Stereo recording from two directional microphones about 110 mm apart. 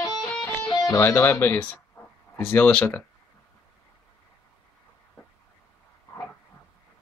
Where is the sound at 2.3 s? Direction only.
20° left (ahead or behind).